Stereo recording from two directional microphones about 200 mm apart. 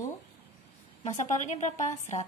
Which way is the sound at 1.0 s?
35° left (ahead or behind).